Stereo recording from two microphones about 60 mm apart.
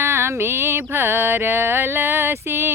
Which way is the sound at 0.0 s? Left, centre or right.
Right.